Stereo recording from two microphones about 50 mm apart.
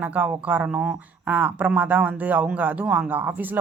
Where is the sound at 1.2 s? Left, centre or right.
Right.